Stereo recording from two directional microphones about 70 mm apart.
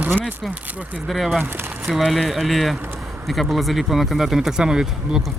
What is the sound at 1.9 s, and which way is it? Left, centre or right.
Speech, centre.